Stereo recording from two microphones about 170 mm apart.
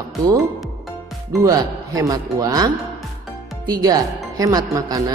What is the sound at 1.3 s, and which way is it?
Speech, 20° right (ahead or behind).